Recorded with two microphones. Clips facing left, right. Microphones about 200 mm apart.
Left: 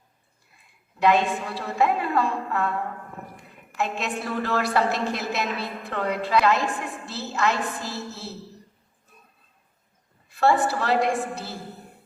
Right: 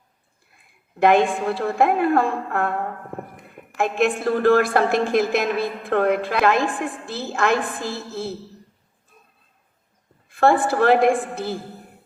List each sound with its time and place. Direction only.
0.9 s a woman's voice: 50° right (ahead or behind)
3.8 s a woman's voice: 50° right (ahead or behind)
10.2 s a woman's voice: 55° right (ahead or behind)